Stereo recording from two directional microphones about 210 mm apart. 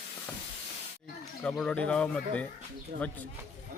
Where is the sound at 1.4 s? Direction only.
5° left (ahead or behind).